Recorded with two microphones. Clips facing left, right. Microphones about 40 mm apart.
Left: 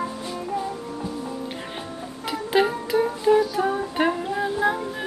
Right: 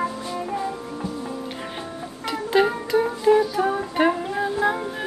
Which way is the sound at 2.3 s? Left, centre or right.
Centre.